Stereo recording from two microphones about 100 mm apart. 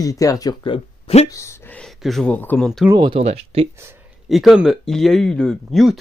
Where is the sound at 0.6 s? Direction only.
70° left (ahead or behind).